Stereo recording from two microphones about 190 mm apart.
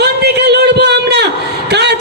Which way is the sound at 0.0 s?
60° right (ahead or behind).